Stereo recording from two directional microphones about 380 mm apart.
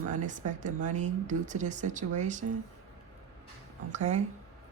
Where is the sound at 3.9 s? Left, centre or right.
Centre.